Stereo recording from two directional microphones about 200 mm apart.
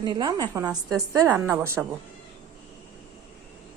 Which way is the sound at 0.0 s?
20° right (ahead or behind).